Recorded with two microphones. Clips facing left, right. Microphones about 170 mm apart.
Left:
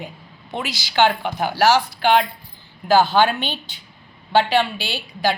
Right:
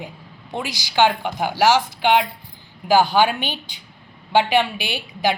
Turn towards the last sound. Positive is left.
turn(degrees=-15)  # may be behind; listen again after turning